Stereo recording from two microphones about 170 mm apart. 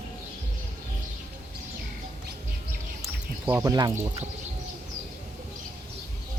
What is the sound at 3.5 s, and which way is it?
Speech, 20° right (ahead or behind).